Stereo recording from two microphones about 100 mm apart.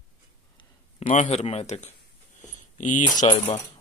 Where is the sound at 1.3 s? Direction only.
90° left.